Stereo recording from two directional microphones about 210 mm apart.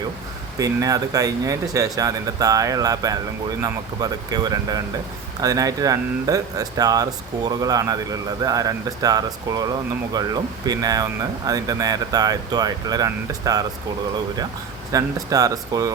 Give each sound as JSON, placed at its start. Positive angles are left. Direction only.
{"t": 0.6, "sound": "speech", "side_deg": -15}
{"t": 14.9, "sound": "speech", "side_deg": -15}